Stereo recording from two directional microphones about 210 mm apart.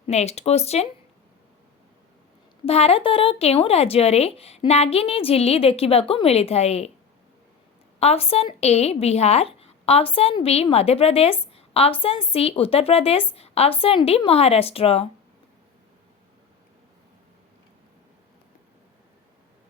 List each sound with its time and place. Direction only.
0.1 s speech: 30° left (ahead or behind)
2.6 s speech: 30° left (ahead or behind)
7.9 s speech: 30° left (ahead or behind)